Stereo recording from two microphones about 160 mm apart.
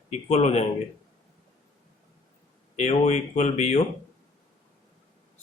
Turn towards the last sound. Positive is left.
turn(degrees=45)  # may be behind; listen again after turning